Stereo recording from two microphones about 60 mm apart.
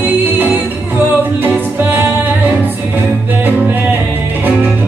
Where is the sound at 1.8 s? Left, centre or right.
Right.